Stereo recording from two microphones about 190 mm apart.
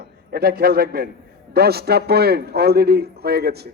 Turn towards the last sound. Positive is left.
turn(degrees=-55)  # may be behind; listen again after turning